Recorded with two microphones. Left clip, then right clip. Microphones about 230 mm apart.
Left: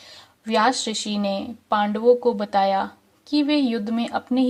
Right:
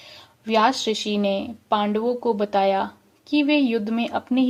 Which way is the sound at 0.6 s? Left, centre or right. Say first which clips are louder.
Right 1 dB; left.